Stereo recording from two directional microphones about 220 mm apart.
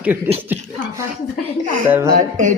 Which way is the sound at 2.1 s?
35° right (ahead or behind).